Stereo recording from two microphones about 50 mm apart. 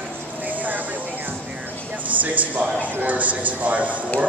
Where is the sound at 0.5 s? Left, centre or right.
Right.